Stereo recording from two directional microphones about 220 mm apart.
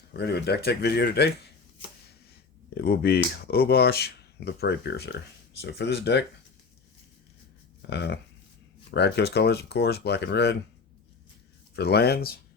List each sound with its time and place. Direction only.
0.1 s speech: 50° left (ahead or behind)
2.7 s speech: 45° left (ahead or behind)
7.8 s speech: 50° left (ahead or behind)
11.8 s speech: 45° left (ahead or behind)